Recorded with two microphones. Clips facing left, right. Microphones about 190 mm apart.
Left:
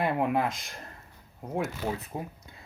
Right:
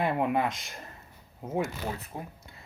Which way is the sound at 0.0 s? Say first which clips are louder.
Even; centre (ahead or behind).